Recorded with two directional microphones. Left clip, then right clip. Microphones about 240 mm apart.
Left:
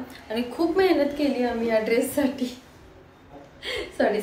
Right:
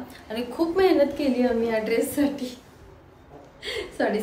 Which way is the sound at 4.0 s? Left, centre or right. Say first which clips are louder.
Left 2 dB; centre.